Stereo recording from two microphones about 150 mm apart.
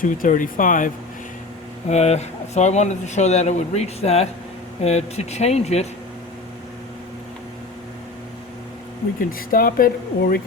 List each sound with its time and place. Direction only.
0.0 s speech: 65° left (ahead or behind)
1.9 s speech: 45° left (ahead or behind)
9.5 s a woman's voice: 70° left (ahead or behind)